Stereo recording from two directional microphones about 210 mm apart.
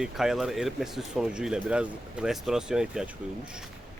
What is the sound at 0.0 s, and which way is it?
Speech, centre (ahead or behind).